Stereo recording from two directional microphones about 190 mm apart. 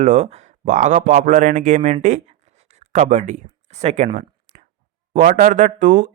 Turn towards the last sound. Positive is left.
turn(degrees=-40)  # may be behind; listen again after turning